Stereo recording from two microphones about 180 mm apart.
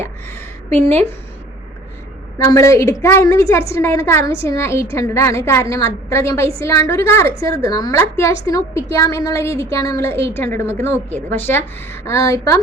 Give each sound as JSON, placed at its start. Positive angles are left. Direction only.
{"t": 0.7, "sound": "a woman's voice", "side_deg": 10}
{"t": 2.4, "sound": "a woman's voice", "side_deg": 15}